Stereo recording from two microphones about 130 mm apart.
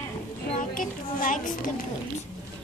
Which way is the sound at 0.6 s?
90° left.